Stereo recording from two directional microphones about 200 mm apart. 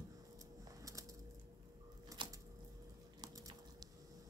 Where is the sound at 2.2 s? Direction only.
25° right (ahead or behind).